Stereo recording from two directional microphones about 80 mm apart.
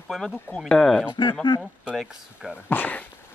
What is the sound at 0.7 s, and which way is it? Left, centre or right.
Speech, centre.